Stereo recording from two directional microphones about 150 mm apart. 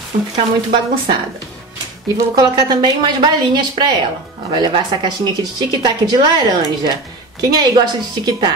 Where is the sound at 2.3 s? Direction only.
30° right (ahead or behind).